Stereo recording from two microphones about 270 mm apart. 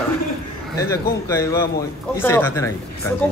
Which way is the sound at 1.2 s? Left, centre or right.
Centre.